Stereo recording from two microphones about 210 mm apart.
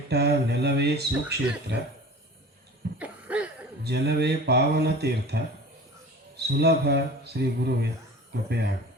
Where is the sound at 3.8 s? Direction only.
50° right (ahead or behind).